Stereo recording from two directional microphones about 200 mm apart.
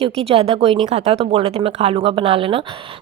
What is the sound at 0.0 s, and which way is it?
Speech, 30° right (ahead or behind).